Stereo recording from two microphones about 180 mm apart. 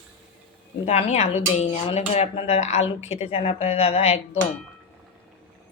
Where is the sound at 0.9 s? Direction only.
40° left (ahead or behind).